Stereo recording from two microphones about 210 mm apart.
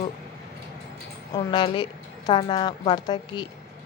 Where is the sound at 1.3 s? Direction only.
25° left (ahead or behind).